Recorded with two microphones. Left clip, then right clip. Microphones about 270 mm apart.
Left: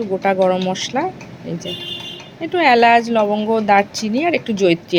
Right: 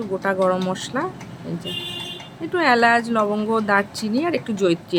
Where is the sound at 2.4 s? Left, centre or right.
Centre.